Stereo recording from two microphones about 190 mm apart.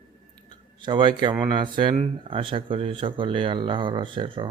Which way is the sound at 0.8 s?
25° right (ahead or behind).